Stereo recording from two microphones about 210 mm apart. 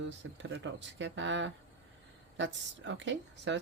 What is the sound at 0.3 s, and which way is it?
A woman's voice, 60° right (ahead or behind).